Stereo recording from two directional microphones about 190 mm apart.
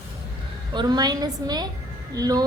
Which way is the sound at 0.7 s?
25° right (ahead or behind).